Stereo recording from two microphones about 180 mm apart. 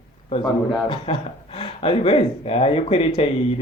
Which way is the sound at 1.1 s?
30° left (ahead or behind).